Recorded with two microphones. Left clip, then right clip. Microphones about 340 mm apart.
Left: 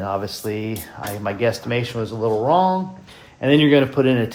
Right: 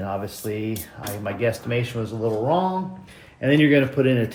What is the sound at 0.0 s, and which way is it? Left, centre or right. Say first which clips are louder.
Speech: left 4 dB; centre.